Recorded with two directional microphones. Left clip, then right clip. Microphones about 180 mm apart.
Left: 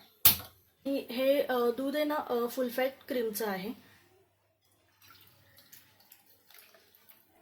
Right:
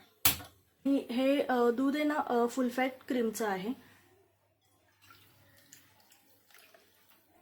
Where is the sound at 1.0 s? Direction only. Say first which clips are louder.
Left 4 dB; 25° right (ahead or behind).